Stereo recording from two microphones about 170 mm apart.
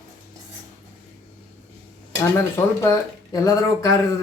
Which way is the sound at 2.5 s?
15° left (ahead or behind).